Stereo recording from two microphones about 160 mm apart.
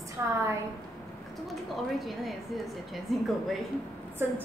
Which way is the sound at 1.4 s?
Centre (ahead or behind).